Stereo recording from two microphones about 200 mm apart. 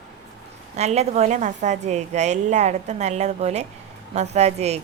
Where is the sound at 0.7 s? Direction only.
35° right (ahead or behind).